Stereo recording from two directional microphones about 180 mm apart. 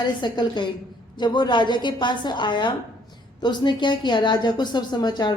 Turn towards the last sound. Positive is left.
turn(degrees=25)  # may be behind; listen again after turning